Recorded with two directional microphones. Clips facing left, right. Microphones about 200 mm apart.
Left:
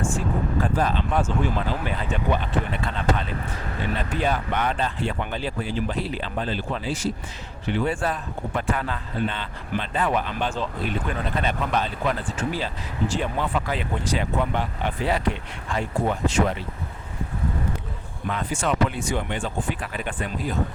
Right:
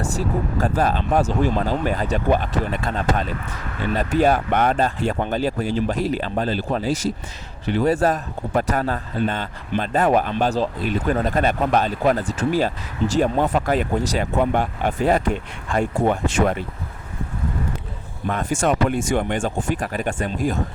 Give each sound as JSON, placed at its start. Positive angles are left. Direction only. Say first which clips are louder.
{"t": 0.0, "sound": "speech", "louder": "right 2 dB", "side_deg": -40}
{"t": 18.3, "sound": "speech", "louder": "right 5 dB", "side_deg": -45}